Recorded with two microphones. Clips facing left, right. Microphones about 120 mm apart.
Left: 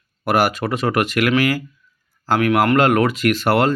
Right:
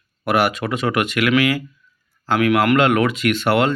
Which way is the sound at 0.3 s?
40° left (ahead or behind).